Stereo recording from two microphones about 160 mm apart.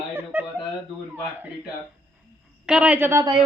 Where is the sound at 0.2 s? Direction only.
15° right (ahead or behind).